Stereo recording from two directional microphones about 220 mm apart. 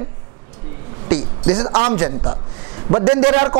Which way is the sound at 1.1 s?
25° right (ahead or behind).